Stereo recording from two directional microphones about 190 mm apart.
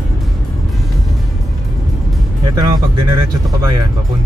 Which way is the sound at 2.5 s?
20° right (ahead or behind).